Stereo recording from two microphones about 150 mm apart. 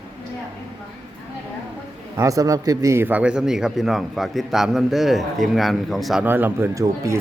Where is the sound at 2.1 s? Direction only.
20° right (ahead or behind); by 6.2 s centre (ahead or behind).